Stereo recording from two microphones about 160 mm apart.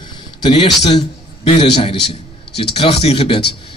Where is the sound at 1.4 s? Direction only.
35° left (ahead or behind).